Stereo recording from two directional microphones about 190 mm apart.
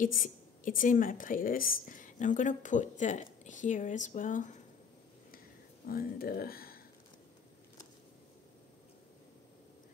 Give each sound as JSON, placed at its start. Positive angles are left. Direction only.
{"t": 0.0, "sound": "speech", "side_deg": 45}
{"t": 5.9, "sound": "speech", "side_deg": 50}